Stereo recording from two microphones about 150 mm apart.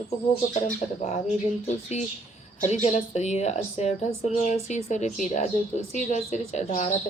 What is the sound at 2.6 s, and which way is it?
Speech, 50° left (ahead or behind).